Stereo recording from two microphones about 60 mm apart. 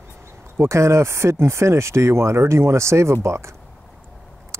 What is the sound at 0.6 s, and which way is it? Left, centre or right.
Speech, right.